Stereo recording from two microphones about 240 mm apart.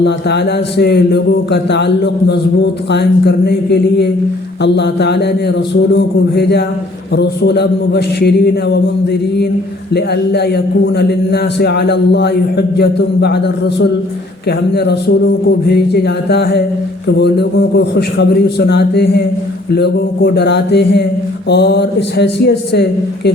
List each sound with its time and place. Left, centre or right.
0.0 s a man's voice: left
9.9 s a man's voice: left